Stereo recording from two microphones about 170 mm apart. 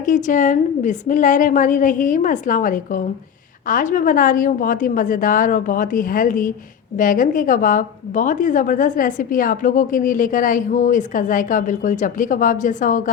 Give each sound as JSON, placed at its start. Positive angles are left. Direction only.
{"t": 0.0, "sound": "a woman's voice", "side_deg": 50}